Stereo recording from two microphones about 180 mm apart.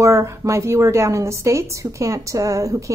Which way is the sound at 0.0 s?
15° right (ahead or behind).